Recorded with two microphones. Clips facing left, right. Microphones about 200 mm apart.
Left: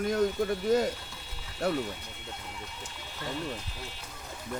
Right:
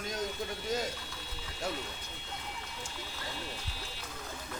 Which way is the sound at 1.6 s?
60° left (ahead or behind).